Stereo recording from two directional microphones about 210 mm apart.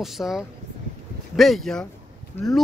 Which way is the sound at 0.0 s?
Centre (ahead or behind).